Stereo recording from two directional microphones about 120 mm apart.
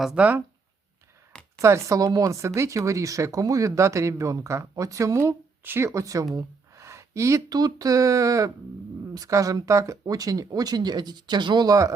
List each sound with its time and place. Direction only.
0.0 s speech: 10° right (ahead or behind)
1.6 s speech: 25° right (ahead or behind)